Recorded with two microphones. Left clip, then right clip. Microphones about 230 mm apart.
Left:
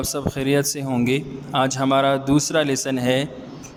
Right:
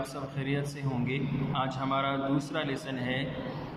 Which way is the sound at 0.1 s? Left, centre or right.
Left.